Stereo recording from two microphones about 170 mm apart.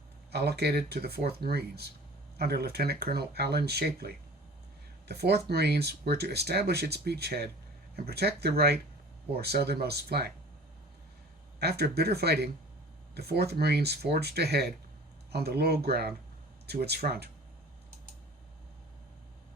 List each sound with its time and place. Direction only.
0.3 s speech: 70° right (ahead or behind)
11.6 s speech: 70° right (ahead or behind)